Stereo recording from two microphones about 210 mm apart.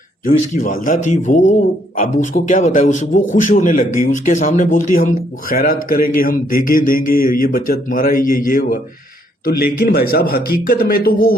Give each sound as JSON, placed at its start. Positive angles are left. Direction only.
{"t": 0.3, "sound": "a man's voice", "side_deg": 40}